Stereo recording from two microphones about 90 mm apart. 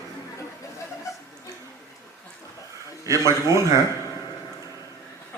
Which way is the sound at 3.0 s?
35° right (ahead or behind).